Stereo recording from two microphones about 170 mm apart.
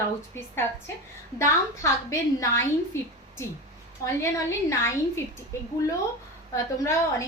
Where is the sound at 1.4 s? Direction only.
15° left (ahead or behind).